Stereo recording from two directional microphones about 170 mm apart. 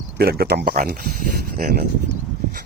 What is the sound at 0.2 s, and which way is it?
Speech, 65° right (ahead or behind).